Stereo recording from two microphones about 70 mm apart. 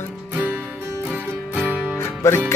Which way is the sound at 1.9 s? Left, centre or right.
Left.